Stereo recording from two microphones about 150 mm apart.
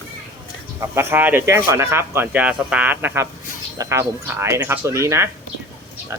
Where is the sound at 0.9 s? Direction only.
15° right (ahead or behind).